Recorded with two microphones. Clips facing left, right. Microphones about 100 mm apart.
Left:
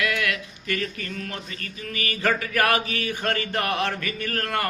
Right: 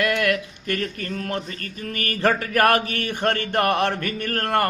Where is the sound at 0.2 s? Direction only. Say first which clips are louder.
Right 6 dB; 50° right (ahead or behind).